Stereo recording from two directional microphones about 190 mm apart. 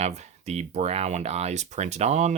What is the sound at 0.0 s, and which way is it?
Speech, 35° right (ahead or behind).